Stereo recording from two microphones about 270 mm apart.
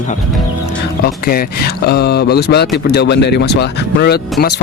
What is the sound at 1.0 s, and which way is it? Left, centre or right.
Speech, left.